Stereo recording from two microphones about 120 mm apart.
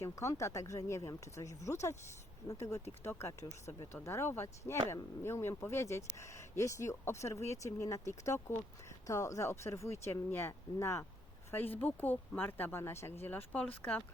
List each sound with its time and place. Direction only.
0.0 s speech: 25° left (ahead or behind)